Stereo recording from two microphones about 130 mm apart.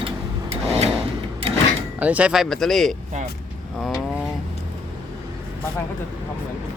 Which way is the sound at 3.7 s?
5° left (ahead or behind).